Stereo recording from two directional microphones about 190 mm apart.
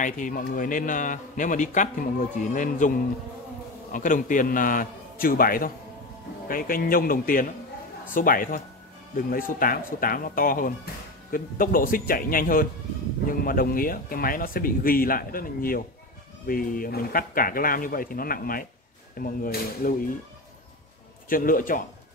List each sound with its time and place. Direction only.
0.0 s a man's voice: 45° left (ahead or behind)
3.9 s a man's voice: 45° left (ahead or behind)
21.3 s a man's voice: 45° left (ahead or behind)